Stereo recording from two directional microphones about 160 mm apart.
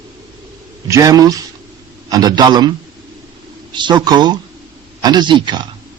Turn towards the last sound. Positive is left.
turn(degrees=-30)  # may be behind; listen again after turning